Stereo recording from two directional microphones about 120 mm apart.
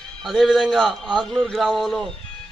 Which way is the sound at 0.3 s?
Centre (ahead or behind).